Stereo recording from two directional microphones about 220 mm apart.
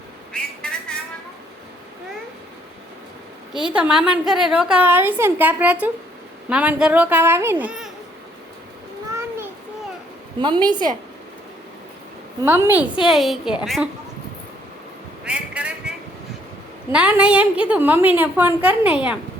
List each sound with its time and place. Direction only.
0.3 s a sound: 5° left (ahead or behind)
3.5 s a woman's voice: 5° right (ahead or behind)
10.4 s a woman's voice: 20° right (ahead or behind)
12.4 s a woman's voice: 10° right (ahead or behind)
15.2 s a sound: 5° right (ahead or behind)
16.9 s a woman's voice: 5° right (ahead or behind)